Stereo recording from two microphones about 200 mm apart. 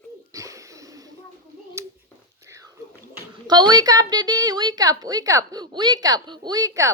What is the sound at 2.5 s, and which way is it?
Whispering, 15° right (ahead or behind).